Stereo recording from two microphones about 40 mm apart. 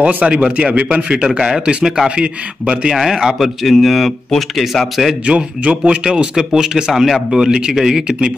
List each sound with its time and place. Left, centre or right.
0.2 s speech: right
0.5 s a man's voice: right
3.0 s speech: centre
3.4 s speech: centre
5.2 s speech: right
6.0 s speech: centre